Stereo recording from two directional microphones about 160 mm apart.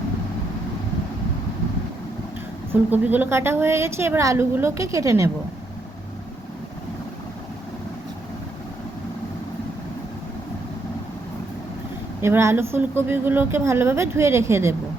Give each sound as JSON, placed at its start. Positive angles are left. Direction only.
{"t": 2.9, "sound": "speech", "side_deg": -10}
{"t": 12.2, "sound": "speech", "side_deg": -15}